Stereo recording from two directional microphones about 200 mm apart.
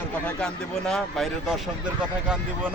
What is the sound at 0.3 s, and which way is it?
Speech, 5° left (ahead or behind).